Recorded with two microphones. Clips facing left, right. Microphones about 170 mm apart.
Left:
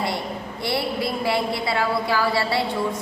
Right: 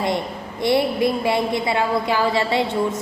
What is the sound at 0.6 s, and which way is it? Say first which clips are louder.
A woman's voice: right 7 dB; 20° right (ahead or behind).